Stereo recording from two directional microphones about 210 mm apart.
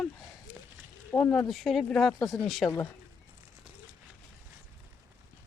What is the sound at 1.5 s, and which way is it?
Speech, centre (ahead or behind).